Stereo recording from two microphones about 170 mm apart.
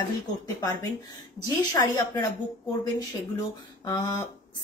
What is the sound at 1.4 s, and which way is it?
Speech, 25° left (ahead or behind).